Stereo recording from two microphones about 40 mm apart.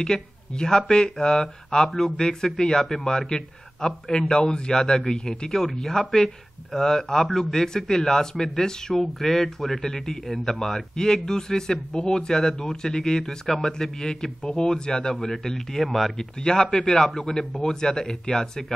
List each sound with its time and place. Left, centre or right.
0.0 s a man's voice: centre
16.3 s a man's voice: centre